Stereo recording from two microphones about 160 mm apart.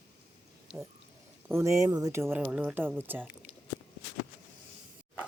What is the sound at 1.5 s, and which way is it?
Speech, 15° right (ahead or behind).